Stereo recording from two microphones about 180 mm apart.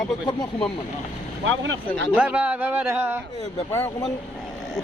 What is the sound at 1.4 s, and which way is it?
Speech, 90° right.